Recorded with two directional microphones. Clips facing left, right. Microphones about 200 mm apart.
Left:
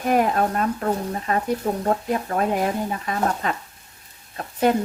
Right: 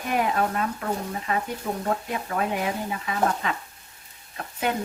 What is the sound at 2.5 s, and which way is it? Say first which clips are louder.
Speech: left 5 dB; 45° left (ahead or behind).